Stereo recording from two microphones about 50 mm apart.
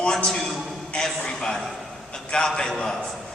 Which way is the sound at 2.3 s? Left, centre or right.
Centre.